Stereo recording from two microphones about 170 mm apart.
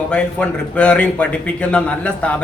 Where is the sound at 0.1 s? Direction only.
5° left (ahead or behind).